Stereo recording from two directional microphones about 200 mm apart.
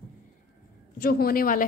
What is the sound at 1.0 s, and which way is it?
Speech, 50° left (ahead or behind).